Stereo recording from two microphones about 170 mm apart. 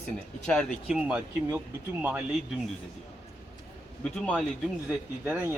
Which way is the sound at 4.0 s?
5° left (ahead or behind).